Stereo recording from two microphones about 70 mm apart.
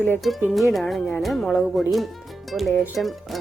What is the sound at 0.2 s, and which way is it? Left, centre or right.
Speech, centre.